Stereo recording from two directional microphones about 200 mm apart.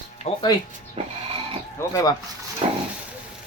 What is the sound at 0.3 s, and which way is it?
Speech, 35° left (ahead or behind).